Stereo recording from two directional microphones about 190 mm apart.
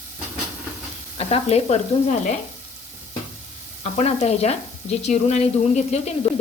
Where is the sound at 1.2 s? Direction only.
30° left (ahead or behind).